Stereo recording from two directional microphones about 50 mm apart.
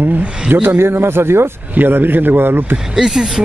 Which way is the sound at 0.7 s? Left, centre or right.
Right.